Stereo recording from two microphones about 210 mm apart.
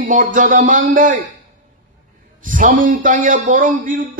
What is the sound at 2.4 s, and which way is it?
Speech, 40° right (ahead or behind).